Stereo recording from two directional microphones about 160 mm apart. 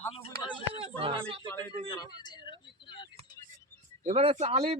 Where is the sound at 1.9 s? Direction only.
25° left (ahead or behind).